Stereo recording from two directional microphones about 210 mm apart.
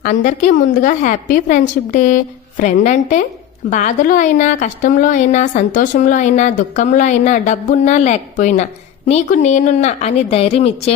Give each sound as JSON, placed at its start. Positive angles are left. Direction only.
{"t": 0.0, "sound": "a woman's voice", "side_deg": 40}